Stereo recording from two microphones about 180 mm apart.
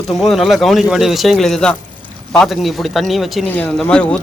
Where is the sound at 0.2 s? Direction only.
Centre (ahead or behind).